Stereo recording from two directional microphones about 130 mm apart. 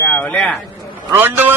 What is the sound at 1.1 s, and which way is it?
Speech, 15° right (ahead or behind).